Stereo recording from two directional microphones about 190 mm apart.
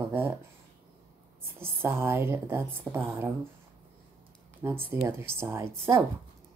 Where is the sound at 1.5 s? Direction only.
10° right (ahead or behind).